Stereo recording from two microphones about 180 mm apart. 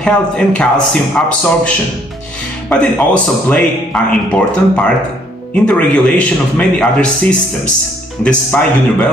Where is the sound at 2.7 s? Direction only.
5° left (ahead or behind).